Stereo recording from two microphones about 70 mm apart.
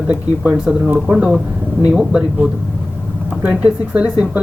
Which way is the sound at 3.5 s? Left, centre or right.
Centre.